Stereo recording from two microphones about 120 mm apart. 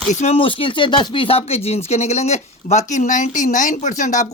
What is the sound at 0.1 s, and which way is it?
Speech, 80° left.